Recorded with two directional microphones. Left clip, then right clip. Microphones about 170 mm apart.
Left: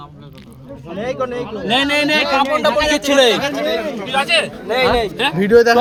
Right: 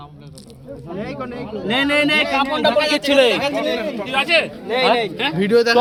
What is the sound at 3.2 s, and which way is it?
Speech, 20° left (ahead or behind).